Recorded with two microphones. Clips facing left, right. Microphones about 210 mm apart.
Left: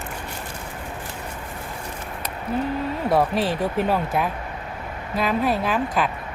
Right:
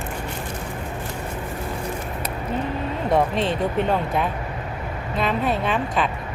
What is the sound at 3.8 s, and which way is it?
A woman's voice, 5° left (ahead or behind).